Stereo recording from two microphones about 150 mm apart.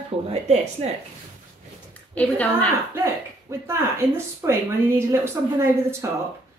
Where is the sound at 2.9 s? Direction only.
15° right (ahead or behind).